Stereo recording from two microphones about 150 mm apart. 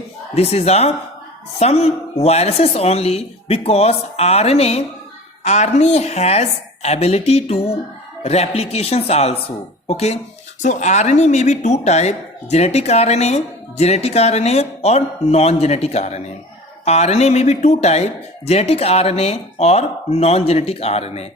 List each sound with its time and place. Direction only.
0.3 s speech: 45° left (ahead or behind)